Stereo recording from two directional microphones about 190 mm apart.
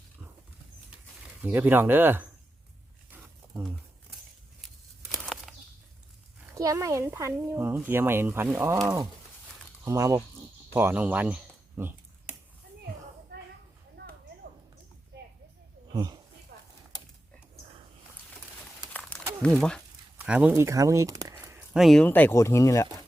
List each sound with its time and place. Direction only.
1.4 s speech: 10° right (ahead or behind)
5.2 s bird flight: centre (ahead or behind)
6.6 s speech: 15° right (ahead or behind)
10.8 s a sound: 10° right (ahead or behind)
13.3 s a sound: 55° right (ahead or behind)
15.9 s speech: 20° right (ahead or behind)
16.5 s a sound: 55° right (ahead or behind)
19.4 s speech: 5° left (ahead or behind)
20.1 s speech: 10° right (ahead or behind)
21.7 s speech: centre (ahead or behind); by 22.9 s 15° left (ahead or behind)